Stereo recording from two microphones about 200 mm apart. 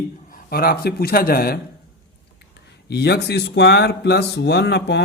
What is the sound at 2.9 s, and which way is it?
Speech, 55° left (ahead or behind).